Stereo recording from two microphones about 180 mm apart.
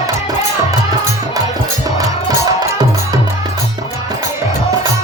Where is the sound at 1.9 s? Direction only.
20° right (ahead or behind).